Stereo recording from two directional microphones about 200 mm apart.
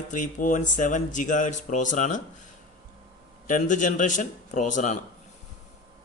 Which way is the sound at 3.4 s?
40° left (ahead or behind).